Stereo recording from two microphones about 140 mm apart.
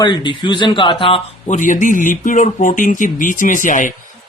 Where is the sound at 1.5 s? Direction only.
65° left (ahead or behind).